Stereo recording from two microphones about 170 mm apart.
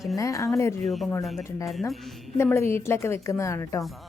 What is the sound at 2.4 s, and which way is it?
A woman's voice, 15° left (ahead or behind).